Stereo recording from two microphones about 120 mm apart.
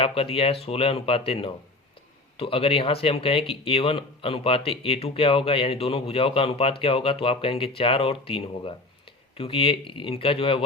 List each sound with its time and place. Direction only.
0.0 s speech: 50° left (ahead or behind)